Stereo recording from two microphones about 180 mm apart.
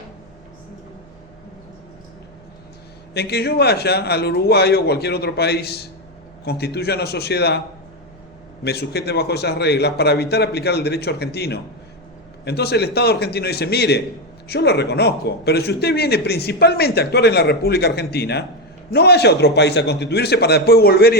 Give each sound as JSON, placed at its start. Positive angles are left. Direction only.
{"t": 3.2, "sound": "a man's voice", "side_deg": 65}
{"t": 8.6, "sound": "a man's voice", "side_deg": 65}